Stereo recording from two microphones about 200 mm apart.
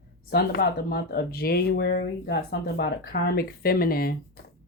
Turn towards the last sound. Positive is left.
turn(degrees=50)  # may be behind; listen again after turning